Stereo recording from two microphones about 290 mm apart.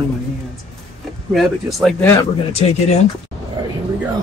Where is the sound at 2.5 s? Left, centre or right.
Left.